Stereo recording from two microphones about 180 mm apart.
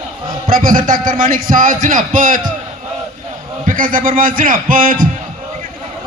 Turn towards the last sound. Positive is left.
turn(degrees=-50)  # may be behind; listen again after turning